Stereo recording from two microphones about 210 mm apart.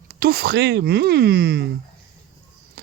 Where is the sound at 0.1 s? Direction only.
45° right (ahead or behind).